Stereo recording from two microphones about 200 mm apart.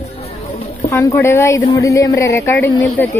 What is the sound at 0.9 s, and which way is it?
Speech, 10° left (ahead or behind).